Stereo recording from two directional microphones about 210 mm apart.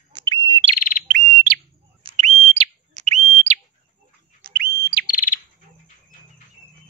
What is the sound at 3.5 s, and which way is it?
Smoke detector, 30° right (ahead or behind).